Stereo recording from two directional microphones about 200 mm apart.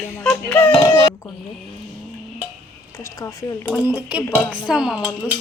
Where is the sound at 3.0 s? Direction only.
15° left (ahead or behind).